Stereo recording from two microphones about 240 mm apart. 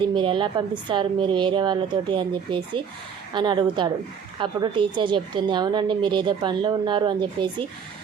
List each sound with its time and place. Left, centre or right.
0.0 s a woman's voice: centre